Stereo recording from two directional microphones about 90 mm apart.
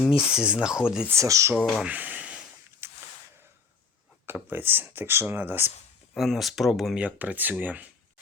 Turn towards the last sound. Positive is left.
turn(degrees=-20)  # may be behind; listen again after turning